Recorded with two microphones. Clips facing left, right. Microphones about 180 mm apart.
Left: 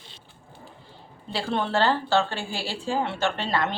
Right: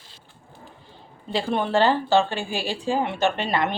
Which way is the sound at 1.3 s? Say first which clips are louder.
Right 3 dB; 15° right (ahead or behind).